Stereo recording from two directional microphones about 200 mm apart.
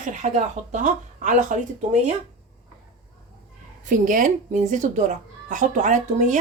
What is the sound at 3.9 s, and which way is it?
A woman's voice, 40° right (ahead or behind).